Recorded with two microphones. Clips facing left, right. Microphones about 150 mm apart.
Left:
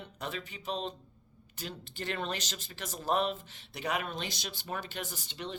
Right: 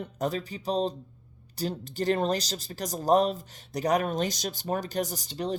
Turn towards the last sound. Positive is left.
turn(degrees=-40)  # may be behind; listen again after turning